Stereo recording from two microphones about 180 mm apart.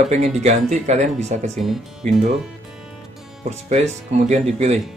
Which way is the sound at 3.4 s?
40° right (ahead or behind).